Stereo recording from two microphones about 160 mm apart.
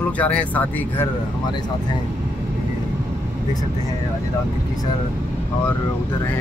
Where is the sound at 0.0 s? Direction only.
10° left (ahead or behind).